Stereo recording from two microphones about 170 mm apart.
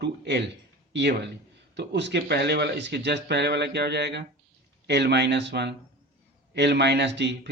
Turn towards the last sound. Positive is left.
turn(degrees=-90)